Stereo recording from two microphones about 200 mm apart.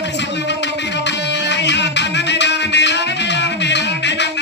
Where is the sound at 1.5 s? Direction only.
60° left (ahead or behind).